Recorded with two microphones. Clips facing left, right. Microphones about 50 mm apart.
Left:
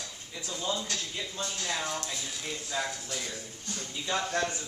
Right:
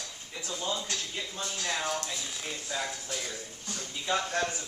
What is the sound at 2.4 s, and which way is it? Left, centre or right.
Speech, centre.